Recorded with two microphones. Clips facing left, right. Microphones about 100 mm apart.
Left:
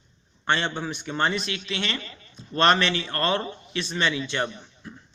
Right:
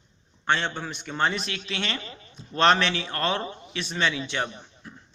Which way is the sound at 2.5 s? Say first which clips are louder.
Even; centre (ahead or behind).